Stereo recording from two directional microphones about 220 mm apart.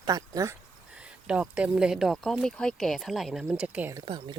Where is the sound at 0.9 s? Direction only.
5° right (ahead or behind).